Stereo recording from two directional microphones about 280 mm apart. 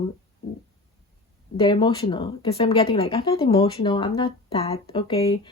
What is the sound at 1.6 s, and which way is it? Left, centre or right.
A woman's voice, centre.